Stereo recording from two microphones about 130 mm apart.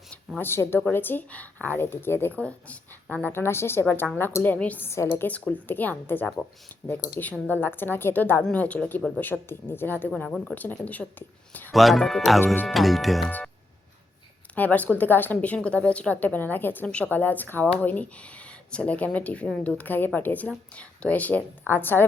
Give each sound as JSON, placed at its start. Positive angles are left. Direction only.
{"t": 0.3, "sound": "a woman's voice", "side_deg": 20}
{"t": 11.7, "sound": "speech", "side_deg": 0}
{"t": 14.5, "sound": "speech", "side_deg": 10}